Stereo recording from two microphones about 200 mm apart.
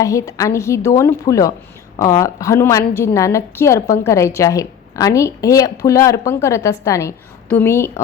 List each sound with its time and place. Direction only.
0.0 s a woman's voice: 15° left (ahead or behind)